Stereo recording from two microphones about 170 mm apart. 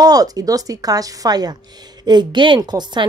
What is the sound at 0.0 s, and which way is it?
Speech, 20° right (ahead or behind).